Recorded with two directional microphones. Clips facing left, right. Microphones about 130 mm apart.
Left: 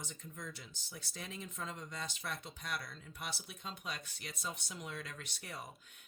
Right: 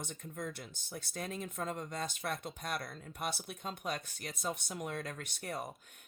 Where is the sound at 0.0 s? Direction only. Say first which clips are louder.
Right 6 dB; 55° right (ahead or behind).